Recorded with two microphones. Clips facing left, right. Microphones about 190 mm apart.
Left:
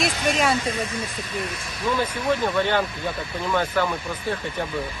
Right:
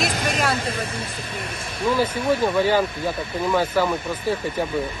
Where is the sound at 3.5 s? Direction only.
10° right (ahead or behind).